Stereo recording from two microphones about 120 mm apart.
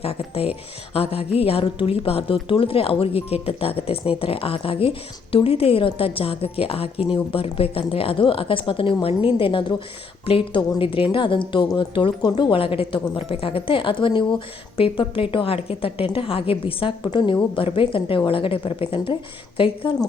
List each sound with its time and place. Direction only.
0.0 s a woman's voice: 55° left (ahead or behind)